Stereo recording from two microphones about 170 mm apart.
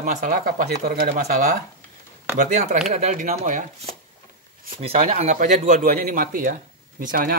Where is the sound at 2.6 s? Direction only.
45° right (ahead or behind).